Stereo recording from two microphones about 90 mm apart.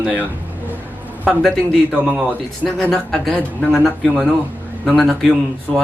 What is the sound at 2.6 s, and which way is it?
A man's voice, 10° left (ahead or behind).